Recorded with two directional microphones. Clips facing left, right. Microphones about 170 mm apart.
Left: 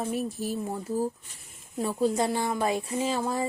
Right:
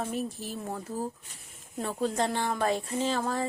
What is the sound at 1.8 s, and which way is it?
A woman's voice, 10° left (ahead or behind).